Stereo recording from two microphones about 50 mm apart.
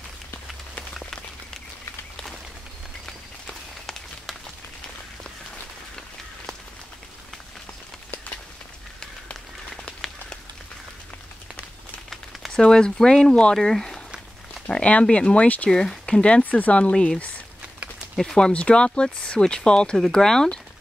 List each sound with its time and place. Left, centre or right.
0.9 s a sound: centre
3.1 s run: centre
12.1 s a sound: centre
12.5 s speech: centre
14.7 s speech: left
15.7 s speech: centre
16.4 s speech: left
18.1 s speech: centre
18.5 s speech: left